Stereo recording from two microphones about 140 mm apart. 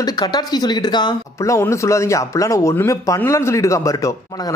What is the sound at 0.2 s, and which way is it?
A man's voice, 30° left (ahead or behind).